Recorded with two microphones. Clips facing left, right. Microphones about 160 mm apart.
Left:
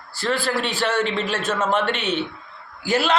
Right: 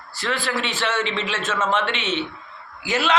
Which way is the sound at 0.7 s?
35° left (ahead or behind).